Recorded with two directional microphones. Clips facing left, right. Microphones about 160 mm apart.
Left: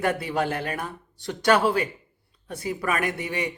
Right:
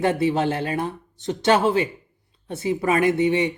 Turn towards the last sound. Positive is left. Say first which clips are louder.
# right 9 dB
turn(degrees=-25)  # may be behind; listen again after turning